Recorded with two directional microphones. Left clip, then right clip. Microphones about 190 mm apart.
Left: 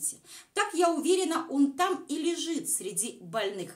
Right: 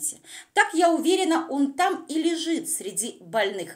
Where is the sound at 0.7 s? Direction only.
20° right (ahead or behind).